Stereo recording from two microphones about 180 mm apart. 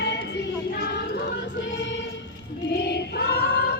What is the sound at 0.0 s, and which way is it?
Music, 75° left (ahead or behind).